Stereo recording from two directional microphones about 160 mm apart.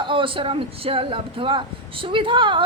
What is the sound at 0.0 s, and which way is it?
Speech, 30° right (ahead or behind).